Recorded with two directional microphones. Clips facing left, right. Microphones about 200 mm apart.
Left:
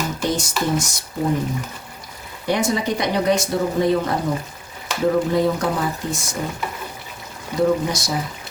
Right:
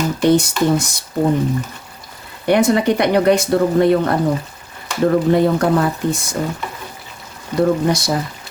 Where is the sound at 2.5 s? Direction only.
60° right (ahead or behind).